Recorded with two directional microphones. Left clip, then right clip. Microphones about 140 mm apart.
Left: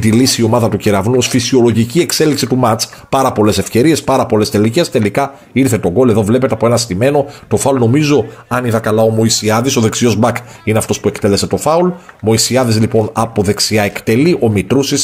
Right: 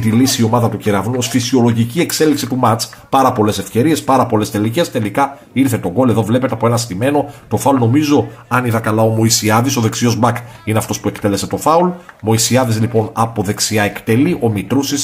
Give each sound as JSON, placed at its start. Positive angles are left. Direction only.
{"t": 0.0, "sound": "speech", "side_deg": 55}
{"t": 1.2, "sound": "speech", "side_deg": 45}
{"t": 2.0, "sound": "a man's voice", "side_deg": 60}
{"t": 9.5, "sound": "speech", "side_deg": 35}
{"t": 13.1, "sound": "speech", "side_deg": 45}